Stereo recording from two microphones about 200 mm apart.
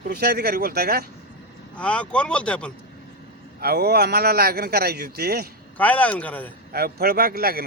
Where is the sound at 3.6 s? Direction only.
50° right (ahead or behind).